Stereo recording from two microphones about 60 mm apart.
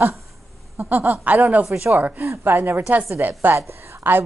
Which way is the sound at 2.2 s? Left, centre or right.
Right.